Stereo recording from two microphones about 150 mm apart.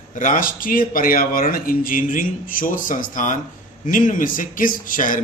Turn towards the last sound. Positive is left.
turn(degrees=65)  # may be behind; listen again after turning